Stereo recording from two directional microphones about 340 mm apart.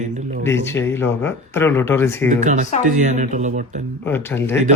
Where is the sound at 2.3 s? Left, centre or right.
Right.